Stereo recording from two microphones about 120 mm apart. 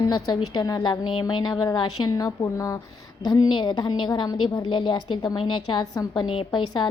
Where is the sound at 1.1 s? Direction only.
45° left (ahead or behind); by 2.8 s 25° left (ahead or behind).